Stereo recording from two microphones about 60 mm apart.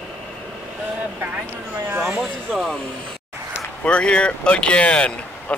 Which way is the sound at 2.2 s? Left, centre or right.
Centre.